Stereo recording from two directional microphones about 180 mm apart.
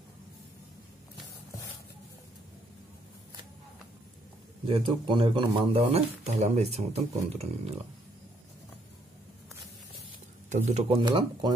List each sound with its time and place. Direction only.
4.6 s speech: 25° right (ahead or behind)
10.5 s speech: 40° right (ahead or behind)
11.0 s speech: 25° right (ahead or behind)